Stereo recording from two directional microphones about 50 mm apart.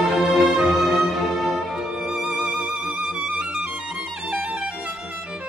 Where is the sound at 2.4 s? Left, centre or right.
Right.